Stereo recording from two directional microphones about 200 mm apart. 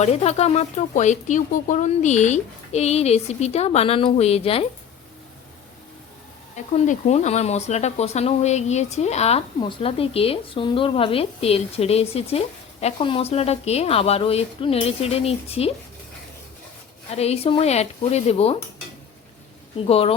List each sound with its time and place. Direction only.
0.0 s speech: 30° left (ahead or behind)
6.7 s a woman's voice: 35° left (ahead or behind)
17.2 s speech: 30° left (ahead or behind)
19.8 s a woman's voice: 30° left (ahead or behind)